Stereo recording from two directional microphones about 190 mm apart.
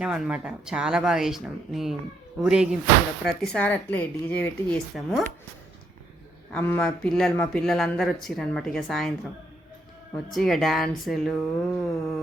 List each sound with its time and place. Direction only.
0.0 s a woman's voice: 5° right (ahead or behind)
6.5 s speech: 10° left (ahead or behind)
10.3 s speech: centre (ahead or behind)